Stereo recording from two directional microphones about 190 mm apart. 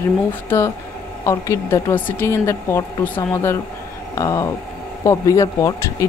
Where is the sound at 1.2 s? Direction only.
15° left (ahead or behind).